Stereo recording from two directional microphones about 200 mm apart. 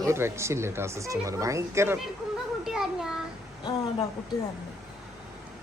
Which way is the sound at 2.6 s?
Centre (ahead or behind).